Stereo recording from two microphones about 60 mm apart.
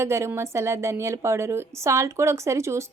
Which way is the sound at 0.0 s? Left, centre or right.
Right.